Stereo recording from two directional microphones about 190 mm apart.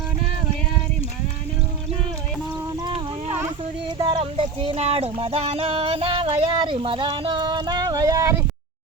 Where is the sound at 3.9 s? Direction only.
20° right (ahead or behind).